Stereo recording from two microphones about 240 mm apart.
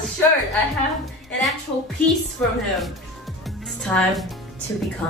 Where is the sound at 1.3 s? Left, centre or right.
Centre.